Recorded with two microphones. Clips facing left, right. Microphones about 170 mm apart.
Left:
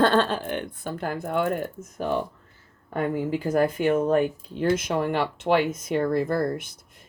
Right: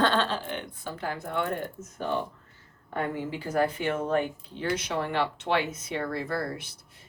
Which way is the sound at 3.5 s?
45° left (ahead or behind).